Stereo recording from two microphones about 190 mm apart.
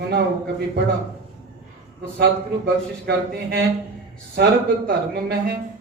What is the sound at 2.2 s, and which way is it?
A man's voice, 60° right (ahead or behind).